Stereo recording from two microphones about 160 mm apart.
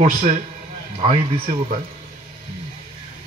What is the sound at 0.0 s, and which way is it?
Speech, 55° right (ahead or behind).